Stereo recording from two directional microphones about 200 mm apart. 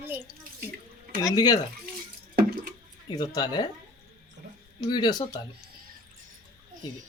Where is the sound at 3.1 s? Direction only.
20° left (ahead or behind).